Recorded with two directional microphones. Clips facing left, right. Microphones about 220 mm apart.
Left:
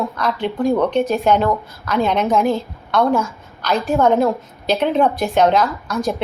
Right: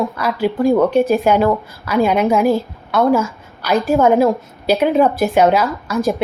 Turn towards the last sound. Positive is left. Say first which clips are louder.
# right 3 dB
turn(degrees=0)  # may be behind; listen again after turning